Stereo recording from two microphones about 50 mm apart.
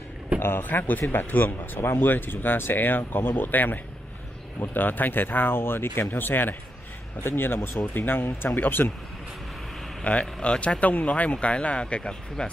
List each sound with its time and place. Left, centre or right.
0.4 s speech: left
1.4 s speech: left
10.1 s speech: left
10.8 s speech: left; by 12.4 s centre